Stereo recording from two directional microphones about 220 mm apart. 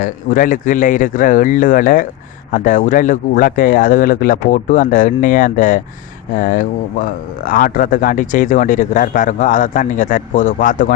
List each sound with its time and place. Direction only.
0.0 s speech: 35° left (ahead or behind)